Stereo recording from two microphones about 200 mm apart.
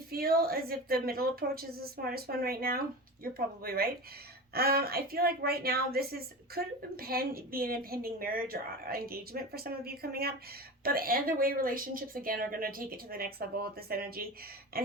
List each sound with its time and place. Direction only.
0.1 s a woman's voice: 50° right (ahead or behind)